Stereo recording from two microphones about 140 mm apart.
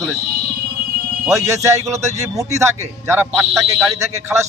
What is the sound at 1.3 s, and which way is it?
A man's voice, 20° right (ahead or behind).